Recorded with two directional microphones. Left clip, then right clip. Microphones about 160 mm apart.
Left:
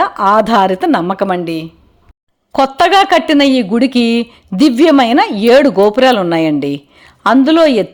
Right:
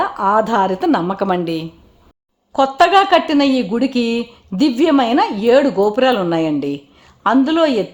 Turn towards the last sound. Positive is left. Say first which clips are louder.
# left 6 dB
turn(degrees=20)  # may be behind; listen again after turning